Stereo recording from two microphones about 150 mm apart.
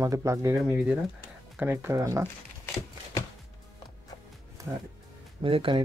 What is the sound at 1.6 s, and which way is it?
Speech, 15° right (ahead or behind).